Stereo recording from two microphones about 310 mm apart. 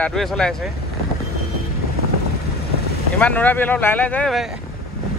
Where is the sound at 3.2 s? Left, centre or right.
Centre.